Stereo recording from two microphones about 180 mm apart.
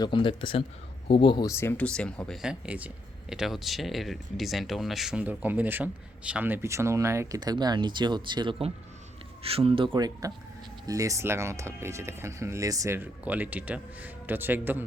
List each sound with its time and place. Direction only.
0.0 s a man's voice: 25° left (ahead or behind); by 14.8 s 10° right (ahead or behind)